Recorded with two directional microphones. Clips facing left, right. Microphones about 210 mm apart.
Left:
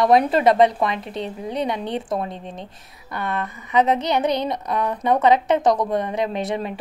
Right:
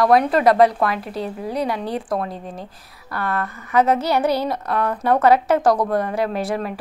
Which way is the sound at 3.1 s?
20° left (ahead or behind).